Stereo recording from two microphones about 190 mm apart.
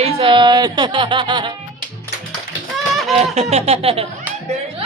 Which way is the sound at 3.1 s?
35° right (ahead or behind).